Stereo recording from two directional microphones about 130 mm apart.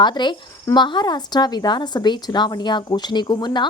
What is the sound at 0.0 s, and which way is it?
Speech, 35° left (ahead or behind).